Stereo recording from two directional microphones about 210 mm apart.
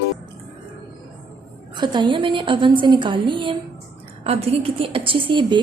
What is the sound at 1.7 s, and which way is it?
A woman's voice, 20° right (ahead or behind).